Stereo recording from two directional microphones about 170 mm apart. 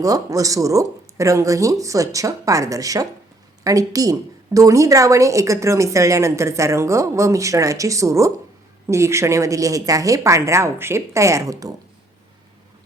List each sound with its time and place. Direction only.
0.0 s speech: 20° right (ahead or behind)